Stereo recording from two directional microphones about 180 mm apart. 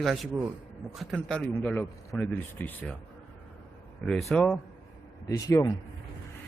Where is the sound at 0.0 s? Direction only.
Centre (ahead or behind).